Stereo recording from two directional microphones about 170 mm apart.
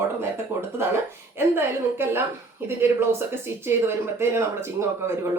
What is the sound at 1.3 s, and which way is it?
Speech, 15° right (ahead or behind).